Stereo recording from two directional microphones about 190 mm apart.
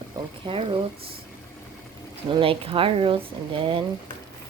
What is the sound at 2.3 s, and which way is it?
Speech, 30° right (ahead or behind).